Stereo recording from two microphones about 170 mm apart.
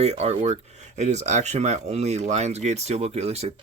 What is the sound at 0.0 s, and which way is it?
Speech, 40° right (ahead or behind).